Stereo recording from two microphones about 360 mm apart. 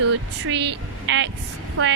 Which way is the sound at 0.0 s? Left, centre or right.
Right.